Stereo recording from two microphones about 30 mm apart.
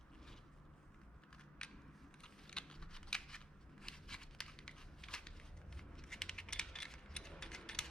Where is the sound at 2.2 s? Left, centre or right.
Left.